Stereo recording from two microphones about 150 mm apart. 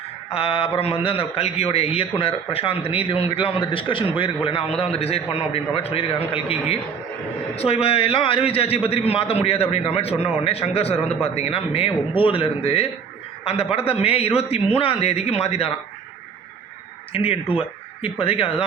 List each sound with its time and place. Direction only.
0.3 s a man's voice: 40° left (ahead or behind)
17.1 s a man's voice: 40° left (ahead or behind)